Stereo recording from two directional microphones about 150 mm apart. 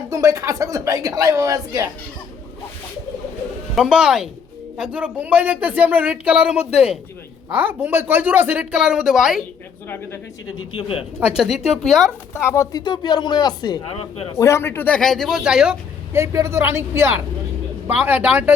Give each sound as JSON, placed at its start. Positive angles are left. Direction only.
{"t": 0.1, "sound": "speech", "side_deg": -20}
{"t": 3.8, "sound": "speech", "side_deg": -5}
{"t": 10.7, "sound": "speech", "side_deg": 35}
{"t": 11.2, "sound": "speech", "side_deg": -5}
{"t": 12.3, "sound": "speech", "side_deg": 15}
{"t": 13.8, "sound": "speech", "side_deg": 40}
{"t": 14.3, "sound": "speech", "side_deg": 20}
{"t": 16.1, "sound": "speech", "side_deg": -20}